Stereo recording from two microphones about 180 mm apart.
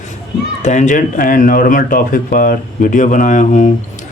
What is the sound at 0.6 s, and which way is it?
Speech, 40° left (ahead or behind).